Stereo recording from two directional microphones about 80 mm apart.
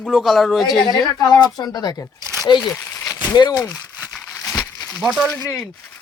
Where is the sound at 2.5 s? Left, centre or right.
Left.